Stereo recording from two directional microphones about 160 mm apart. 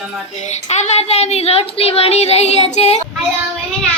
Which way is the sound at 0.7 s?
45° left (ahead or behind).